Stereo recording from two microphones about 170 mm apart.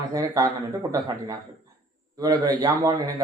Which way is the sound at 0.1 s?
20° right (ahead or behind).